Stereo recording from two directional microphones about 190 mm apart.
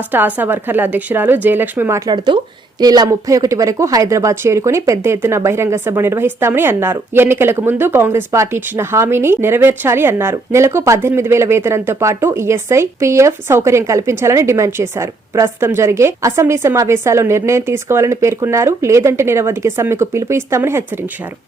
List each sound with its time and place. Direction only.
0.1 s speech: 10° right (ahead or behind)
2.0 s speech: 25° right (ahead or behind)